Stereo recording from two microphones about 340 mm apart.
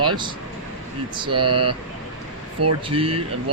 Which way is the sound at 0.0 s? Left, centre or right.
Centre.